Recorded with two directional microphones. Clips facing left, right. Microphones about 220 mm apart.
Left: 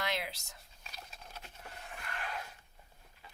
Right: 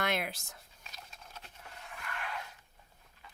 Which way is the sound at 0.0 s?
50° right (ahead or behind).